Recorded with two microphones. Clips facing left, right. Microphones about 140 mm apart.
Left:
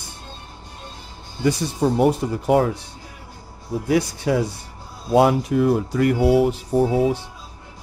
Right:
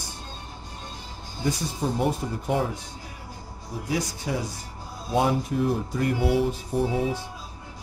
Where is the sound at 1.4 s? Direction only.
90° left.